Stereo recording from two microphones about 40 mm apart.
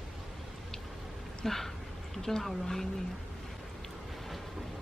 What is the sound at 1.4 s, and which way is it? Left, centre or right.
A woman's voice, centre.